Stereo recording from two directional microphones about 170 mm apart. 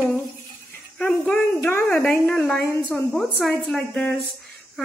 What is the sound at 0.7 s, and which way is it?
A woman's voice, 15° left (ahead or behind).